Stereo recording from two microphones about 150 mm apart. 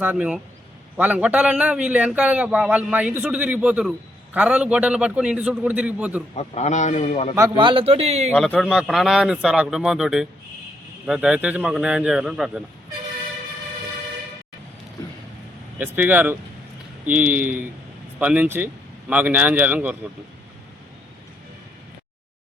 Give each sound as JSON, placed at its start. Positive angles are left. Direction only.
{"t": 0.0, "sound": "a man's voice", "side_deg": -10}
{"t": 6.3, "sound": "a man's voice", "side_deg": 45}
{"t": 7.3, "sound": "a man's voice", "side_deg": -20}
{"t": 7.6, "sound": "a man's voice", "side_deg": -35}
{"t": 8.4, "sound": "a man's voice", "side_deg": 10}
{"t": 8.7, "sound": "a man's voice", "side_deg": -5}
{"t": 15.8, "sound": "a man's voice", "side_deg": -10}